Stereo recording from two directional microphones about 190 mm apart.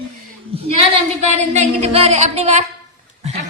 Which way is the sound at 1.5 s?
35° right (ahead or behind).